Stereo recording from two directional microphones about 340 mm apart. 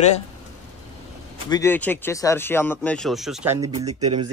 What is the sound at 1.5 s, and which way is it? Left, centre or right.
Speech, centre.